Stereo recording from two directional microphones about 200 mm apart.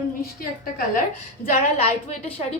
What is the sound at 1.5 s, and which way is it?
Speech, 35° left (ahead or behind).